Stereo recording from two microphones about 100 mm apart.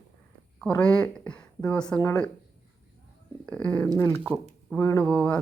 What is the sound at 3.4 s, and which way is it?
Speech, 10° left (ahead or behind).